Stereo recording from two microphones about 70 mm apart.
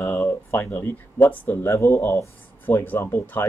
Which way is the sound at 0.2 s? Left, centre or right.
Left.